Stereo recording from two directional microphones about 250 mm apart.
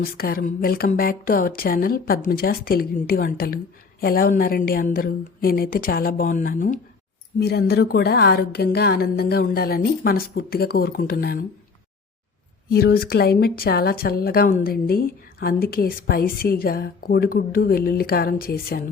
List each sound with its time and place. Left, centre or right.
0.0 s speech: left
12.7 s speech: left